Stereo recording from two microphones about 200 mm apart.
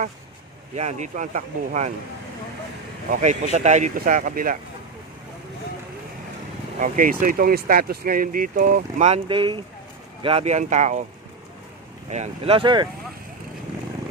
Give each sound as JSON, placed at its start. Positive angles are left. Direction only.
{"t": 0.8, "sound": "speech", "side_deg": -35}
{"t": 3.1, "sound": "speech", "side_deg": -35}
{"t": 6.7, "sound": "speech", "side_deg": -40}
{"t": 12.1, "sound": "speech", "side_deg": -30}